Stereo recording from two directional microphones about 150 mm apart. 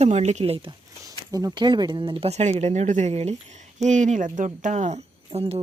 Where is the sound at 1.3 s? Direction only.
25° right (ahead or behind); by 5.0 s 50° right (ahead or behind).